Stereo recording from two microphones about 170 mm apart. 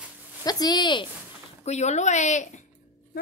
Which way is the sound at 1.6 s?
40° left (ahead or behind).